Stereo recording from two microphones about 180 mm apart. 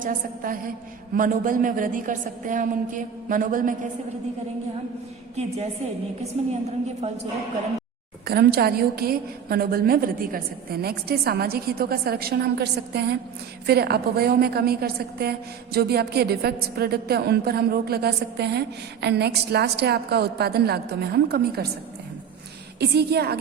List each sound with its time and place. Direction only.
0.0 s a woman's voice: 50° right (ahead or behind)
6.5 s a woman's voice: 35° right (ahead or behind)
8.3 s a woman's voice: 60° right (ahead or behind)
22.8 s a woman's voice: 65° right (ahead or behind)